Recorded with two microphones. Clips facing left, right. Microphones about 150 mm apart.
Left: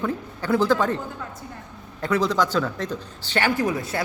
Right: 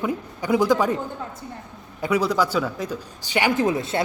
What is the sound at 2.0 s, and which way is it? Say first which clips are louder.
Speech: right 1 dB; 10° right (ahead or behind).